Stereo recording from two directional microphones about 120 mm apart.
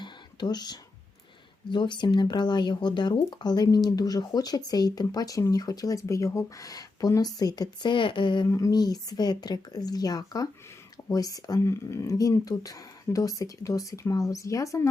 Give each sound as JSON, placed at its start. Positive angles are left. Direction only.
{"t": 0.0, "sound": "whispering", "side_deg": 35}
{"t": 1.7, "sound": "speech", "side_deg": 40}
{"t": 8.4, "sound": "speech", "side_deg": 30}